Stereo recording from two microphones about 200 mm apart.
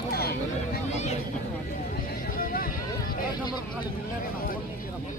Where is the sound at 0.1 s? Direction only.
50° left (ahead or behind).